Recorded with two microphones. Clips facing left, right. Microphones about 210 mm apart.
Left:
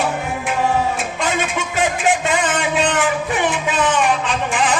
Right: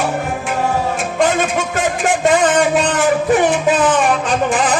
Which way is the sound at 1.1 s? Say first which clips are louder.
Right 6 dB; 45° right (ahead or behind).